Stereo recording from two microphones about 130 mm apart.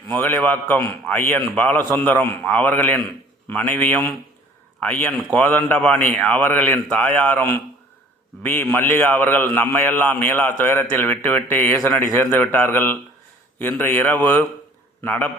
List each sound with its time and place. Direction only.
0.1 s speech: 15° left (ahead or behind)
8.7 s speech: 15° left (ahead or behind)